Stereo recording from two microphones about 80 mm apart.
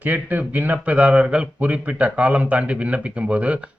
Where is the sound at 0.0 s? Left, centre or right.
Right.